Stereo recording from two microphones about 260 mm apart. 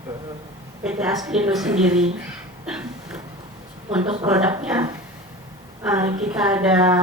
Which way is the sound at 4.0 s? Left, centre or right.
Right.